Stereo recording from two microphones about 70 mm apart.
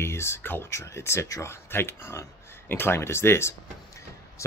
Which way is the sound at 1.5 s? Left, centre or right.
Left.